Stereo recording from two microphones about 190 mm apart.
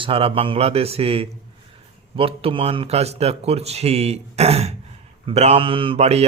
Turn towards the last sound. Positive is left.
turn(degrees=-35)  # may be behind; listen again after turning